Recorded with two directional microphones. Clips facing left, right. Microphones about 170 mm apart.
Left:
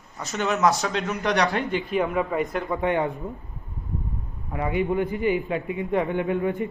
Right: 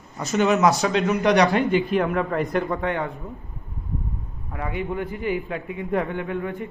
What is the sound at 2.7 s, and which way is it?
Speech, 15° left (ahead or behind).